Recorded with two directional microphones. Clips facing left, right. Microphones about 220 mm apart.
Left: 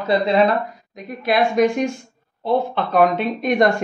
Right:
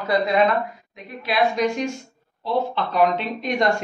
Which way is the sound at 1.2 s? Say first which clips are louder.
Left 4 dB; 50° left (ahead or behind).